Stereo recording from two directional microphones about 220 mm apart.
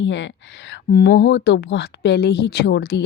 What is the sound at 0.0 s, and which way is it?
A woman's voice, 55° left (ahead or behind).